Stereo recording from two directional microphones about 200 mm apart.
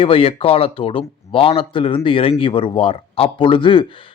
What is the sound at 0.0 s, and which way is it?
Speech, 30° left (ahead or behind).